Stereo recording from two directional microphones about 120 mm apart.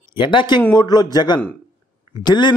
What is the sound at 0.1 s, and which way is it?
A man's voice, 40° left (ahead or behind).